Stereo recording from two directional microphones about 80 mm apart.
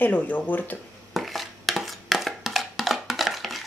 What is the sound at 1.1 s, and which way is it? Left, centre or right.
Chopping, centre.